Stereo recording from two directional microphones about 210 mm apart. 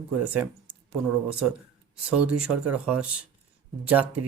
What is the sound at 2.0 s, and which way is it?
Speech, 5° right (ahead or behind).